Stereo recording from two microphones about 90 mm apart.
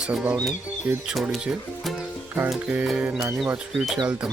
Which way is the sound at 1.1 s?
5° right (ahead or behind).